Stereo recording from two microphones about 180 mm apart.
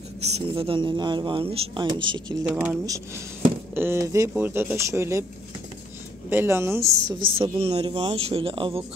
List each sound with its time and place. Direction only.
0.3 s speech: 30° right (ahead or behind)
2.5 s speech: 10° right (ahead or behind)
6.3 s speech: 15° right (ahead or behind)
7.2 s speech: 30° right (ahead or behind)